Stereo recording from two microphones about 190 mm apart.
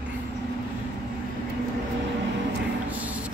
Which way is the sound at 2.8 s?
10° right (ahead or behind).